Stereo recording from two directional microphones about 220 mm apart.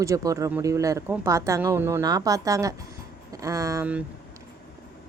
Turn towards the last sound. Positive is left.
turn(degrees=-5)  # may be behind; listen again after turning